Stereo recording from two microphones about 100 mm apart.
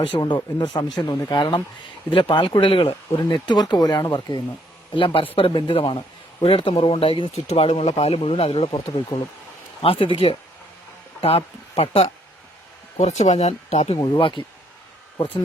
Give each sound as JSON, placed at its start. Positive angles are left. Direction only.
{"t": 0.3, "sound": "speech", "side_deg": 40}
{"t": 1.4, "sound": "speech", "side_deg": 50}
{"t": 3.2, "sound": "speech", "side_deg": 45}
{"t": 4.3, "sound": "speech", "side_deg": 55}
{"t": 6.4, "sound": "speech", "side_deg": 70}
{"t": 9.8, "sound": "speech", "side_deg": 65}
{"t": 11.2, "sound": "speech", "side_deg": 80}
{"t": 14.0, "sound": "speech", "side_deg": 50}